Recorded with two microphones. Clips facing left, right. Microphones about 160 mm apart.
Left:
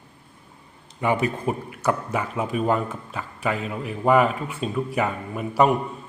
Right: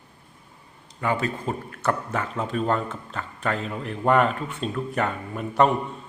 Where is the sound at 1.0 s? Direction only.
15° left (ahead or behind).